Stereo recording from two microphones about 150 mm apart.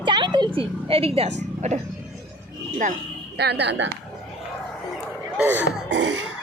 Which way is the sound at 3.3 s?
90° right.